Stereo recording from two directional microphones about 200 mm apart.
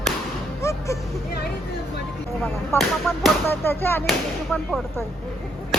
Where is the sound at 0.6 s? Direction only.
15° left (ahead or behind).